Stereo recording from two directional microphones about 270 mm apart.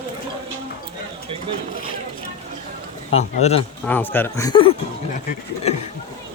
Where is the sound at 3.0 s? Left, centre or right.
Left.